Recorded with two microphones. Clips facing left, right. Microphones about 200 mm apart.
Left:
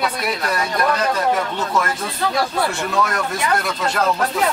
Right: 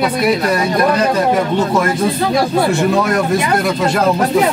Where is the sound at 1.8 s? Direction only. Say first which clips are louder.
Right 7 dB; 15° right (ahead or behind).